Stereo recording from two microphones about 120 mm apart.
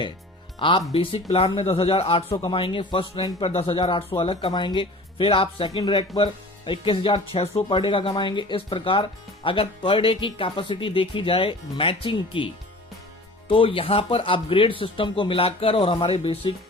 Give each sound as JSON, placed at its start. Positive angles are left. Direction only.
{"t": 0.9, "sound": "speech", "side_deg": 50}
{"t": 13.5, "sound": "speech", "side_deg": 45}